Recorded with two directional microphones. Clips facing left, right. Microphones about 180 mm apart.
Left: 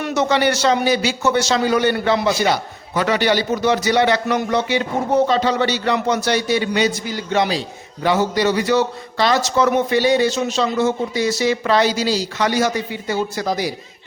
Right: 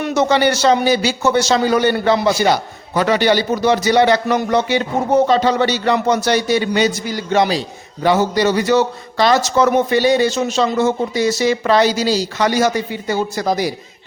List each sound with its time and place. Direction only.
0.1 s a man's voice: 35° right (ahead or behind)